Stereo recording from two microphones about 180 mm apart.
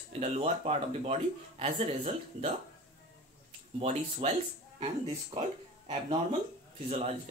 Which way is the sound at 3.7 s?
35° right (ahead or behind).